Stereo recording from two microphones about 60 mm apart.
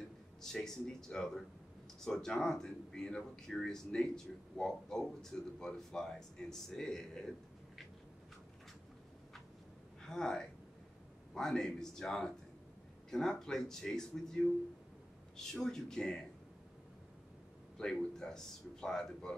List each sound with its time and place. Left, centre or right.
0.4 s speech: centre
10.0 s speech: centre
15.6 s speech: centre
17.7 s speech: centre